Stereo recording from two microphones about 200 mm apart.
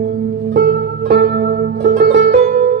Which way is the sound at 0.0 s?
55° right (ahead or behind).